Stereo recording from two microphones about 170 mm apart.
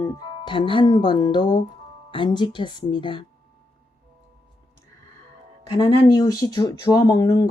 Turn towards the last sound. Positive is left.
turn(degrees=20)  # may be behind; listen again after turning